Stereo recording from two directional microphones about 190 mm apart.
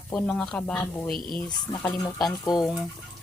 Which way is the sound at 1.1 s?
50° left (ahead or behind).